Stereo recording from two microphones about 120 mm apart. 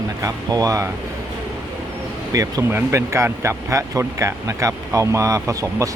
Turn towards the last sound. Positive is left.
turn(degrees=-25)  # may be behind; listen again after turning